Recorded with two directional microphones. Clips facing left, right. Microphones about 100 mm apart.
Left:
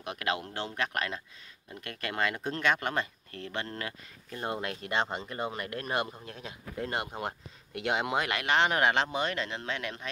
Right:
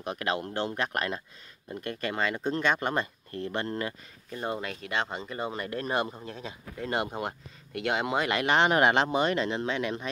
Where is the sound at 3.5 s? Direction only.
35° right (ahead or behind).